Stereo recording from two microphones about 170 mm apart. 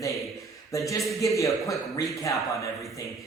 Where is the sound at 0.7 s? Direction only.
20° left (ahead or behind).